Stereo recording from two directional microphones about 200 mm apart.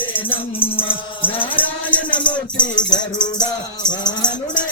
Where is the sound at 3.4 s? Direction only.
20° left (ahead or behind).